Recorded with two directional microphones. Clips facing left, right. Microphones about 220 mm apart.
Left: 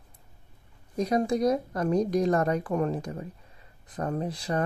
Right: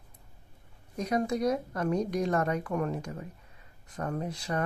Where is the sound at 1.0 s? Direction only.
35° left (ahead or behind).